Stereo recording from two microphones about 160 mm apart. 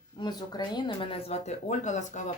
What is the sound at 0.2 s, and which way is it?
Speech, 25° left (ahead or behind).